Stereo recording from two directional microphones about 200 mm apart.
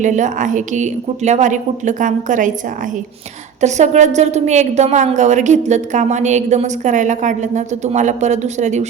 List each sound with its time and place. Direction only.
0.0 s a woman's voice: 40° right (ahead or behind)
3.6 s a woman's voice: 35° right (ahead or behind)